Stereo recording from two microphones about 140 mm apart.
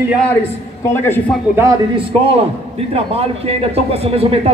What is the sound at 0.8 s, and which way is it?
Speech, 20° left (ahead or behind).